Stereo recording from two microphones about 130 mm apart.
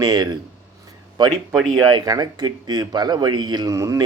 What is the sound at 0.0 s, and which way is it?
Speech, 30° right (ahead or behind).